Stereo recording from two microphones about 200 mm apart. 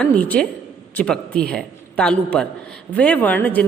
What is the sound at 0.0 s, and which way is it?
A man's voice, 10° left (ahead or behind).